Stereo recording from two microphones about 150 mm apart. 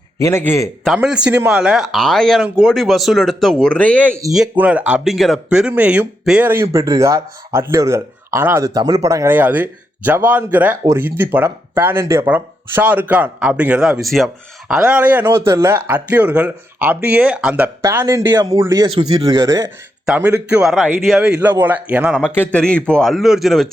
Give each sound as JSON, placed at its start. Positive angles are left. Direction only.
{"t": 0.2, "sound": "a man's voice", "side_deg": 15}
{"t": 0.9, "sound": "speech", "side_deg": -5}
{"t": 4.5, "sound": "speech", "side_deg": -10}
{"t": 20.1, "sound": "speech", "side_deg": -10}
{"t": 22.4, "sound": "speech", "side_deg": 5}